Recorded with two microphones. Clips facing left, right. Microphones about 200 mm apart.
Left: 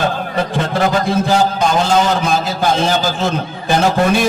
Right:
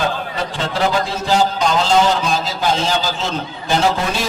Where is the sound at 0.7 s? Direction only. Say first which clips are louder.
Left 2 dB; 50° left (ahead or behind).